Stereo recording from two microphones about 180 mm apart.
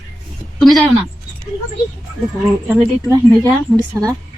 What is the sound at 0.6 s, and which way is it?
Speech, centre (ahead or behind).